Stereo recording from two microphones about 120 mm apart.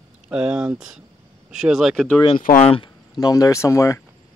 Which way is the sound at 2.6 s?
50° left (ahead or behind).